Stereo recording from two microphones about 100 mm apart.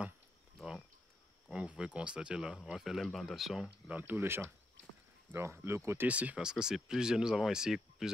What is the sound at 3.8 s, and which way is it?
Speech, 20° right (ahead or behind).